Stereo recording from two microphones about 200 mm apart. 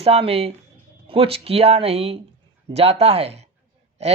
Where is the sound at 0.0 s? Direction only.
30° right (ahead or behind).